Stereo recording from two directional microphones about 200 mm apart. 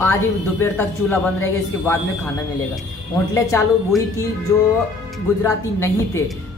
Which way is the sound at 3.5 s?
15° left (ahead or behind).